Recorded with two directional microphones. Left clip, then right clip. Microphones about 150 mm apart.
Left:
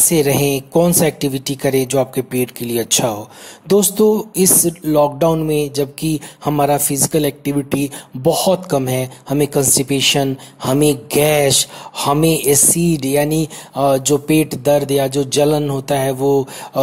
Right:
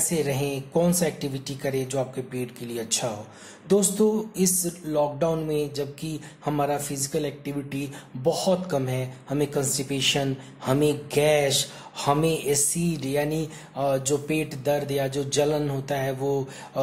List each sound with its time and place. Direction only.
0.1 s speech: 60° left (ahead or behind)